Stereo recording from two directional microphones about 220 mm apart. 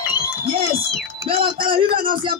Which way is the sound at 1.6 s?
20° right (ahead or behind).